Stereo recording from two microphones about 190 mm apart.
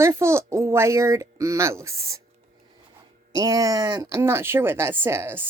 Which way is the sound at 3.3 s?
20° right (ahead or behind).